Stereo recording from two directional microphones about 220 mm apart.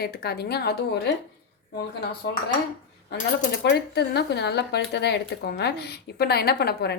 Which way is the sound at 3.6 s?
50° left (ahead or behind).